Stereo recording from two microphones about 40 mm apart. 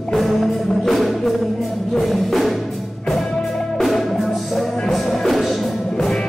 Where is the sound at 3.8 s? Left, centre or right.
Centre.